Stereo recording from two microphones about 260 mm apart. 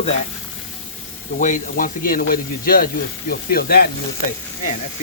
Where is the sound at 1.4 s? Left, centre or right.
Left.